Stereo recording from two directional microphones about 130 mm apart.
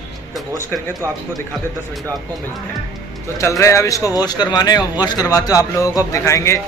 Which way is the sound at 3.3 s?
25° left (ahead or behind).